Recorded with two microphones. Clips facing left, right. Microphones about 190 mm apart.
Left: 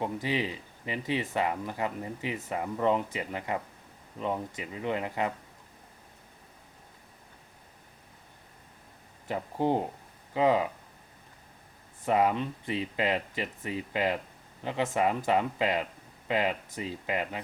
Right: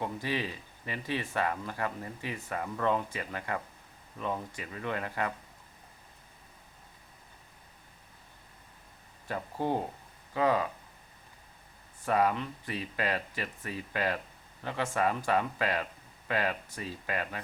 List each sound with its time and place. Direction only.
0.0 s speech: 20° left (ahead or behind)
9.2 s speech: 20° left (ahead or behind)
12.0 s speech: 20° left (ahead or behind)